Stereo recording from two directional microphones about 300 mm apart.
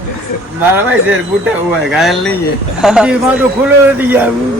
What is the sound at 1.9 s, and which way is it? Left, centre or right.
A man's voice, centre.